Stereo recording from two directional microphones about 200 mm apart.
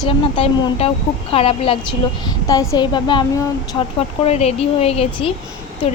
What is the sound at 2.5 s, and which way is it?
A woman's voice, 15° left (ahead or behind).